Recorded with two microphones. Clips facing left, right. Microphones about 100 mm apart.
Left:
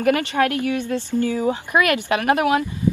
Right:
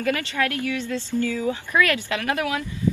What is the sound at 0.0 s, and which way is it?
Speech, 30° left (ahead or behind).